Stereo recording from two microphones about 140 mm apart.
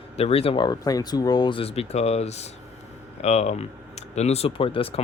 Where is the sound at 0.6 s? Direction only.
25° left (ahead or behind).